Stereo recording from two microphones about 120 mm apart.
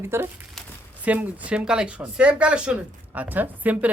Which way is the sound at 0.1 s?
20° right (ahead or behind).